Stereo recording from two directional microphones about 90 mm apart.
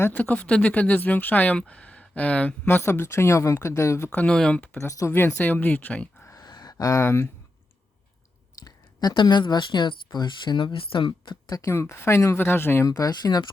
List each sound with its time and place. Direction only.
0.1 s speech: 15° left (ahead or behind)
2.6 s speech: 25° left (ahead or behind)
4.1 s speech: 15° left (ahead or behind)
4.8 s speech: 35° left (ahead or behind)
5.4 s speech: 20° left (ahead or behind)
6.2 s a sound: 45° left (ahead or behind)
8.6 s speech: 50° left (ahead or behind); by 11.3 s 70° left (ahead or behind)
11.4 s speech: 40° left (ahead or behind)
11.7 s speech: 30° left (ahead or behind)
12.8 s speech: 45° left (ahead or behind)